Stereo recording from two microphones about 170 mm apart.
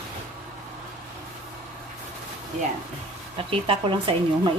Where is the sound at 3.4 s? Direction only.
30° right (ahead or behind).